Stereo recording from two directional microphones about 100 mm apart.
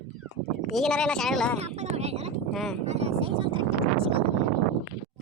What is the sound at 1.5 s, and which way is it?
Speech, 90° right.